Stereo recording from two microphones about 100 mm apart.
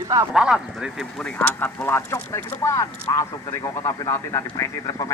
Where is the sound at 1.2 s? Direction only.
15° left (ahead or behind).